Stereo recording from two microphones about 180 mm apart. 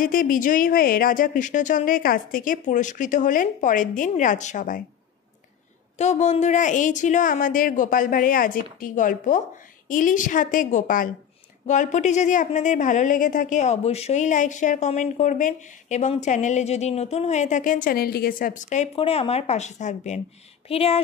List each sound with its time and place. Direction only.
0.0 s a woman's voice: 50° left (ahead or behind)
5.9 s a woman's voice: 40° left (ahead or behind)